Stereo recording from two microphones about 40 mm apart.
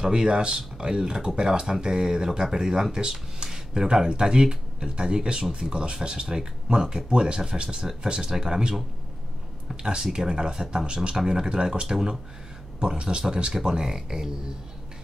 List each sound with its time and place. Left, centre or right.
0.0 s speech: centre